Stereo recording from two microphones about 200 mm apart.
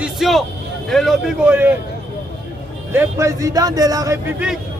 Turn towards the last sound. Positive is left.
turn(degrees=-15)  # may be behind; listen again after turning